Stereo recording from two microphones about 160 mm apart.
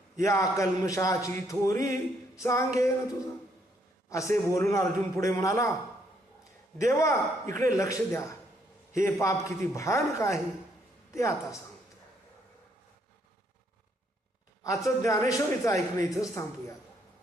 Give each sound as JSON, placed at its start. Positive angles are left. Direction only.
{"t": 0.3, "sound": "a man's voice", "side_deg": 20}
{"t": 1.9, "sound": "a capella", "side_deg": 20}
{"t": 2.7, "sound": "a man's voice", "side_deg": 20}
{"t": 6.7, "sound": "a man's voice", "side_deg": 20}
{"t": 14.8, "sound": "a man's voice", "side_deg": 20}